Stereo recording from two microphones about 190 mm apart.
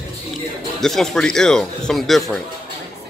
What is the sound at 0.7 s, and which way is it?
A man's voice, centre (ahead or behind).